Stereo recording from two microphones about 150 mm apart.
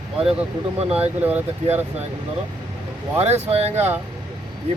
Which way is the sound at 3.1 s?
45° right (ahead or behind).